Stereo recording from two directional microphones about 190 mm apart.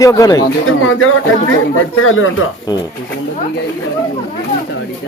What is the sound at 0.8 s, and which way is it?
Speech, 90° left.